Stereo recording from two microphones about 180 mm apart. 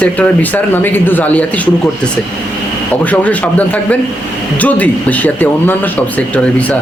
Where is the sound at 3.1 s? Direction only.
10° left (ahead or behind).